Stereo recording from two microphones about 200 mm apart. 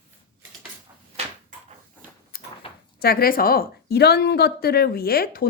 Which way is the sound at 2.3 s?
45° left (ahead or behind).